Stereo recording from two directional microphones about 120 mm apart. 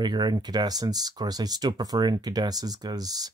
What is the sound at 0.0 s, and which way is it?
Speech, 35° right (ahead or behind).